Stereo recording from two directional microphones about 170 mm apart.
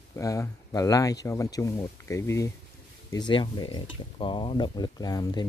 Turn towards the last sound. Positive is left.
turn(degrees=25)  # may be behind; listen again after turning